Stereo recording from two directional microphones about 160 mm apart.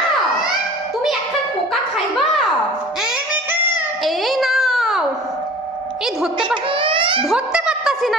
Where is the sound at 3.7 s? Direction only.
Centre (ahead or behind).